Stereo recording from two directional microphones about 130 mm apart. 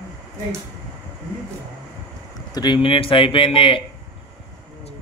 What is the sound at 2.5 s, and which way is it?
A man's voice, 35° left (ahead or behind).